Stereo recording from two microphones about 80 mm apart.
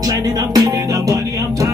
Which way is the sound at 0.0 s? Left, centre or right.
Right.